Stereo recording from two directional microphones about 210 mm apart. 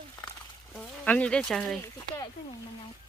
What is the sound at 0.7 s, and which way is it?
Speech, 5° left (ahead or behind).